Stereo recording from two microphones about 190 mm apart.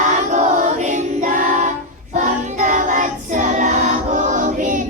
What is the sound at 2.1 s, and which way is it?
Child singing, 40° right (ahead or behind).